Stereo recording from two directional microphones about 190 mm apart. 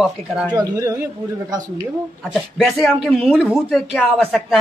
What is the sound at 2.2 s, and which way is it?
Speech, centre (ahead or behind).